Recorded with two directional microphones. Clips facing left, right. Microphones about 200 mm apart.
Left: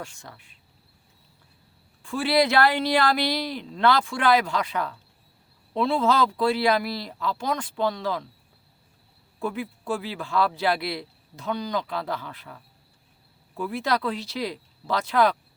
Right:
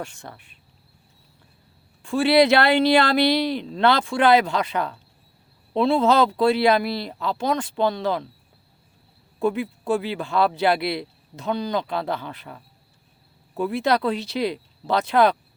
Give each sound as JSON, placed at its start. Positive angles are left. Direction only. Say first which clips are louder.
{"t": 0.0, "sound": "speech", "louder": "right 5 dB", "side_deg": -60}
{"t": 2.1, "sound": "speech", "louder": "right 5 dB", "side_deg": -75}
{"t": 3.3, "sound": "speech", "louder": "right 7 dB", "side_deg": -25}
{"t": 9.4, "sound": "speech", "louder": "right 7 dB", "side_deg": -20}
{"t": 13.6, "sound": "speech", "louder": "right 5 dB", "side_deg": -25}